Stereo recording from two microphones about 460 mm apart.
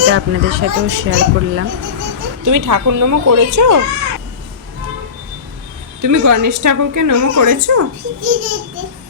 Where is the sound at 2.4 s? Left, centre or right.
Right.